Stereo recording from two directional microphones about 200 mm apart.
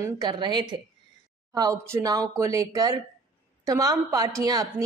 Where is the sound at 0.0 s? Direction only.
20° right (ahead or behind).